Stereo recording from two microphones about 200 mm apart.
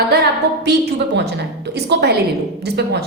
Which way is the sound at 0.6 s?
60° right (ahead or behind).